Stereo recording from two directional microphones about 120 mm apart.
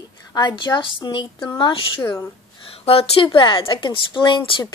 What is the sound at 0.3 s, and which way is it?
A woman's voice, 40° left (ahead or behind).